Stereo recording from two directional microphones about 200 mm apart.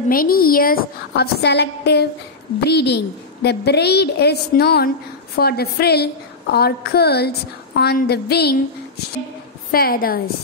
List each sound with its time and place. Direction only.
0.1 s a woman's voice: 45° left (ahead or behind)
9.7 s a woman's voice: 45° left (ahead or behind)